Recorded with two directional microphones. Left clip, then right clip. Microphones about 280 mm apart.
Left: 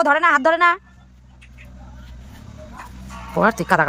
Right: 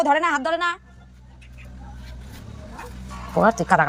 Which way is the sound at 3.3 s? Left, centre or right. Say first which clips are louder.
Left 1 dB; centre.